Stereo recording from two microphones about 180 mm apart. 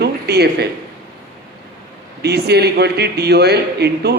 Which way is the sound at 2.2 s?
65° right (ahead or behind).